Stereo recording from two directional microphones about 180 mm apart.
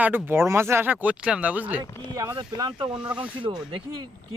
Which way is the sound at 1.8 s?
20° right (ahead or behind).